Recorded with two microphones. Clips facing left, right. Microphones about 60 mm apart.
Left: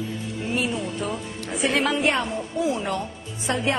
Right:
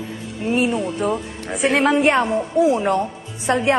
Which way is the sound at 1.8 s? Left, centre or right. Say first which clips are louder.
Right 7 dB; right.